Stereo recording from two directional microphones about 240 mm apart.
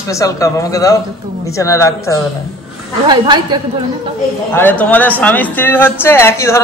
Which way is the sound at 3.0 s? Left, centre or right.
Centre.